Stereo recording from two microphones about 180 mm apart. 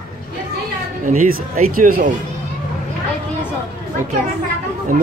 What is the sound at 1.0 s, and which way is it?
Speech, 50° right (ahead or behind).